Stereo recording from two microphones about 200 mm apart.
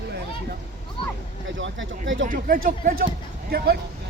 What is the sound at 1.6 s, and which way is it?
Speech, 70° right (ahead or behind).